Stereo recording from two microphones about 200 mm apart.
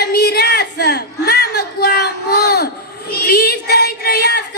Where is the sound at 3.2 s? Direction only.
50° left (ahead or behind).